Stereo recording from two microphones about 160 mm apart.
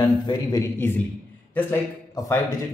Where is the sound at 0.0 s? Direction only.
25° left (ahead or behind).